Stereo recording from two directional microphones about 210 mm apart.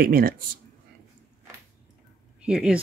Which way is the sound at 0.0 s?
45° right (ahead or behind).